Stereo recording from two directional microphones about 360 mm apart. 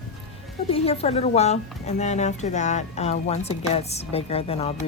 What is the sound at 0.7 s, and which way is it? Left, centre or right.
Speech, centre.